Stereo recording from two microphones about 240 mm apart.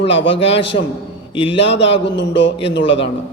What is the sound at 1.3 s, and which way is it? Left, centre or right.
Speech, left.